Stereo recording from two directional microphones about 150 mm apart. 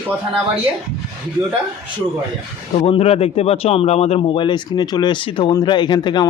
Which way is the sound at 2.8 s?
40° left (ahead or behind).